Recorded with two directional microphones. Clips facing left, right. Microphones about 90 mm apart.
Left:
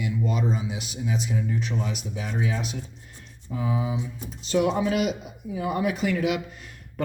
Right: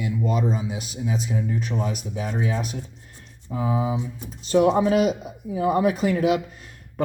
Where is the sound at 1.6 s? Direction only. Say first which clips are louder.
Right 3 dB; 40° right (ahead or behind).